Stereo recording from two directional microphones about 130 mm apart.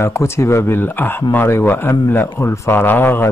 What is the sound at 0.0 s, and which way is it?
Speech, 20° left (ahead or behind).